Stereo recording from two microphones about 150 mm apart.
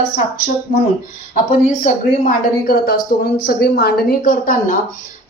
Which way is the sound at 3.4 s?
90° left.